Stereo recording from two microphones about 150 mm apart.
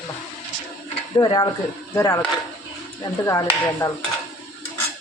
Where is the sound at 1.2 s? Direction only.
30° left (ahead or behind).